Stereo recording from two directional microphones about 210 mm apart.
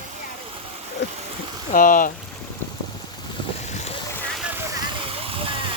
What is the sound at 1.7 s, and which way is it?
Speech, 40° left (ahead or behind).